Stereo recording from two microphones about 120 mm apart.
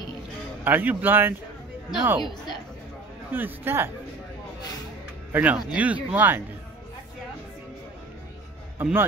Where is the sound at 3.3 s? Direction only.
15° right (ahead or behind).